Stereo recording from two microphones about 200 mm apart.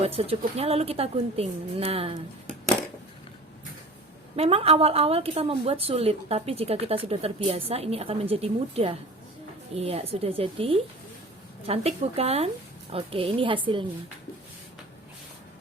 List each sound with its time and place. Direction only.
0.0 s a woman's voice: 30° right (ahead or behind)
4.4 s a woman's voice: 30° right (ahead or behind)